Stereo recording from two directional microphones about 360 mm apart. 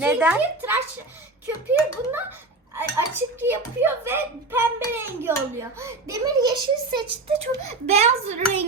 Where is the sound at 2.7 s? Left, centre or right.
Centre.